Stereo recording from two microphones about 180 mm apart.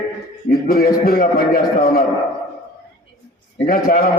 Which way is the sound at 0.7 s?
55° left (ahead or behind).